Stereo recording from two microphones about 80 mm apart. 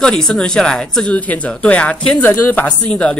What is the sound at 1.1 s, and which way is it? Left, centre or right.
Speech, centre.